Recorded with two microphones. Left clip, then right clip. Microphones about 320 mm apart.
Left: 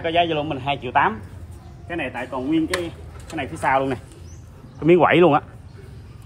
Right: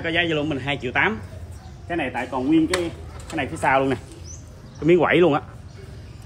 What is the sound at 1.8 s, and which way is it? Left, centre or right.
Speech, centre.